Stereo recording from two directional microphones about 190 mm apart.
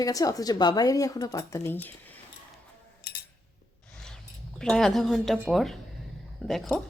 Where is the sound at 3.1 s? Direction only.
65° left (ahead or behind).